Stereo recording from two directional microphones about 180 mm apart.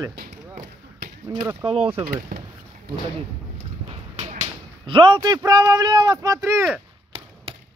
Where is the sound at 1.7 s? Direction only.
35° right (ahead or behind).